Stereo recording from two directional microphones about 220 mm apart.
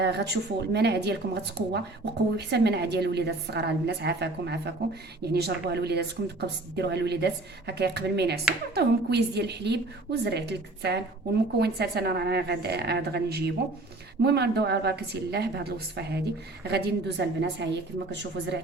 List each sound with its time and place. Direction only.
0.0 s a woman's voice: 50° right (ahead or behind)